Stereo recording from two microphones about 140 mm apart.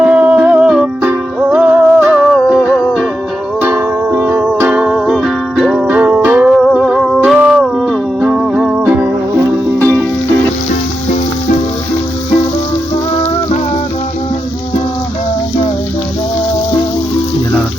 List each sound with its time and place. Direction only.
0.1 s music: 10° right (ahead or behind)
3.6 s music: 15° right (ahead or behind)
9.7 s music: 15° left (ahead or behind)